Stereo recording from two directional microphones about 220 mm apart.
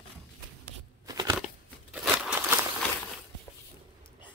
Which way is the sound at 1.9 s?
5° right (ahead or behind).